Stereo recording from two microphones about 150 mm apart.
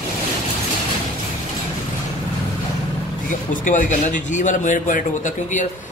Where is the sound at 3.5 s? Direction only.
60° left (ahead or behind).